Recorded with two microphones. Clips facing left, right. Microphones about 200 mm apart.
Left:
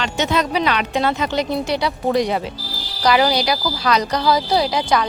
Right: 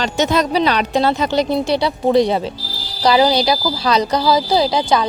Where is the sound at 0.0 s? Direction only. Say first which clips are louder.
Right 3 dB; 40° right (ahead or behind).